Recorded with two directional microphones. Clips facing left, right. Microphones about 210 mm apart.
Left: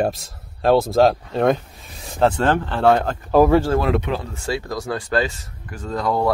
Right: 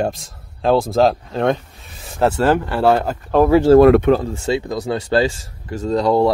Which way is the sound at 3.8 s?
55° right (ahead or behind).